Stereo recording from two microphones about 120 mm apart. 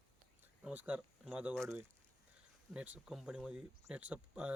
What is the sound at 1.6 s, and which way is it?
Speech, 25° right (ahead or behind).